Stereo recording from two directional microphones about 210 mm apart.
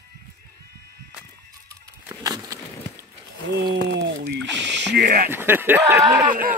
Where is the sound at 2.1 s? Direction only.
15° right (ahead or behind).